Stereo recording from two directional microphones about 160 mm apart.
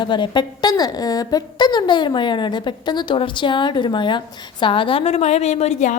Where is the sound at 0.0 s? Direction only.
30° left (ahead or behind).